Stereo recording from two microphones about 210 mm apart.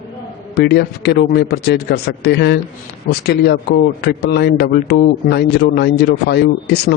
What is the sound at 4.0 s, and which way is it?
A man's voice, 50° left (ahead or behind).